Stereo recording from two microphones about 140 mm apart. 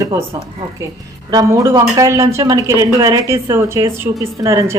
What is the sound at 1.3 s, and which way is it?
Speech, 25° right (ahead or behind).